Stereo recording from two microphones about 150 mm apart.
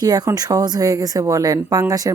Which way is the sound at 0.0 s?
25° right (ahead or behind).